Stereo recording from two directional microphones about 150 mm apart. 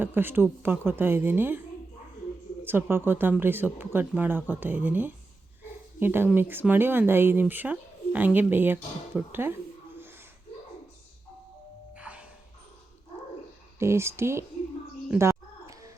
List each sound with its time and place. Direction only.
0.0 s speech: 15° right (ahead or behind)
2.6 s speech: 15° right (ahead or behind)
11.9 s music: 10° right (ahead or behind)
13.7 s speech: 15° right (ahead or behind)
15.1 s a sound: 20° right (ahead or behind)